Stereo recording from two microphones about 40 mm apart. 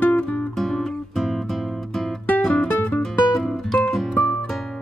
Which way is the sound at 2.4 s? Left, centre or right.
Left.